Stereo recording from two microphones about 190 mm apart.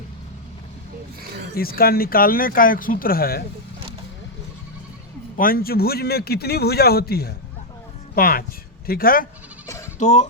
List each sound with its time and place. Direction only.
1.2 s a sound: 55° right (ahead or behind)
1.5 s speech: 50° left (ahead or behind)
5.4 s a man's voice: 50° left (ahead or behind)
9.6 s bleat: 15° left (ahead or behind)
10.0 s speech: 35° left (ahead or behind)